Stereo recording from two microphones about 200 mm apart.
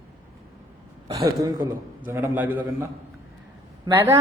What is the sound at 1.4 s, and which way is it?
A woman's voice, 20° right (ahead or behind).